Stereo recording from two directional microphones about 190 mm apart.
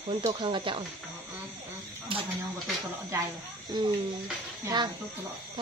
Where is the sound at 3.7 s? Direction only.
20° right (ahead or behind).